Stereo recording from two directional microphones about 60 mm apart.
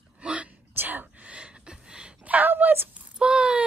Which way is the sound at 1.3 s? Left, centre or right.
Centre.